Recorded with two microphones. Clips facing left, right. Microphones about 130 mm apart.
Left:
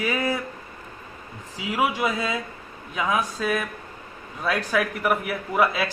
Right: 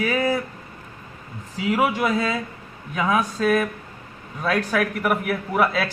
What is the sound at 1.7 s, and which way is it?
A man's voice, 10° left (ahead or behind).